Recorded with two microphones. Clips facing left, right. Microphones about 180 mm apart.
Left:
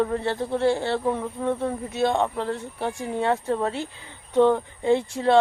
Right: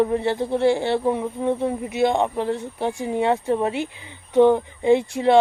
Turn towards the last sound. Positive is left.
turn(degrees=-15)  # may be behind; listen again after turning